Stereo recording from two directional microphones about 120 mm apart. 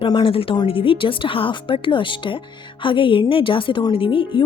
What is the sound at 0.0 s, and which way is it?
A woman's voice, 45° left (ahead or behind).